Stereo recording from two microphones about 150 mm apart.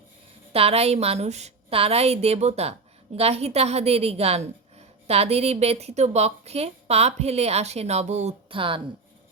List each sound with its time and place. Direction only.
0.5 s a woman's voice: 40° right (ahead or behind)